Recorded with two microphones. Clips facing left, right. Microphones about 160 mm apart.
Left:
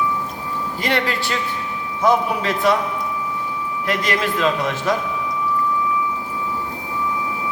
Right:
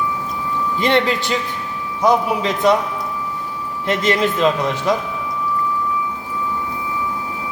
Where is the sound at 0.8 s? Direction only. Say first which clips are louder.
Right 5 dB; 25° right (ahead or behind).